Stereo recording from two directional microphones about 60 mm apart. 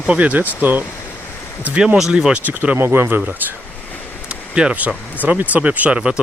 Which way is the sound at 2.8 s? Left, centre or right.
Right.